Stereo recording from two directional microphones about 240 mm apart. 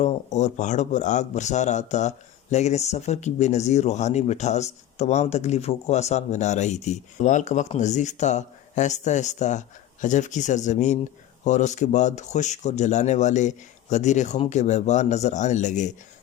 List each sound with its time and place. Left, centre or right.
0.0 s speech: left